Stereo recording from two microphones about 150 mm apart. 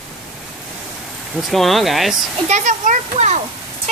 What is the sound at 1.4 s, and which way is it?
Speech, centre (ahead or behind).